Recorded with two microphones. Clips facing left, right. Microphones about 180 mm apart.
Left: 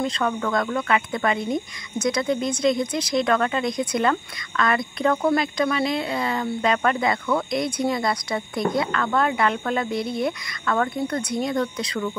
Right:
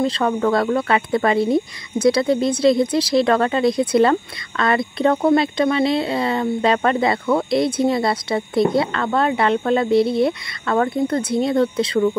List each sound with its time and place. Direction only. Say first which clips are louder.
0.0 s speech: right 6 dB; 35° right (ahead or behind)